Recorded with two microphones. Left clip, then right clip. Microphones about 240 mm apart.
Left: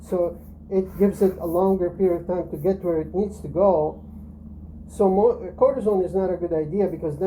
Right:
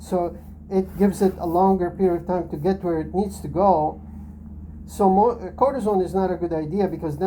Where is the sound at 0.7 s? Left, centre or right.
Right.